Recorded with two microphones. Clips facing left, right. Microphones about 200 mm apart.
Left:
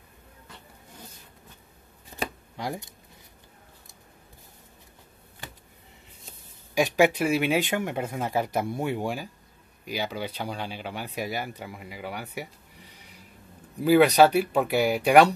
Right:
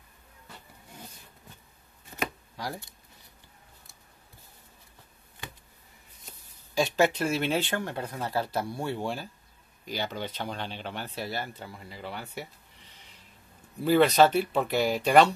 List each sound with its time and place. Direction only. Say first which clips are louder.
2.5 s speech: left 4 dB; 20° left (ahead or behind)
6.7 s speech: left 3 dB; 15° left (ahead or behind)
13.7 s speech: left 3 dB; 10° left (ahead or behind)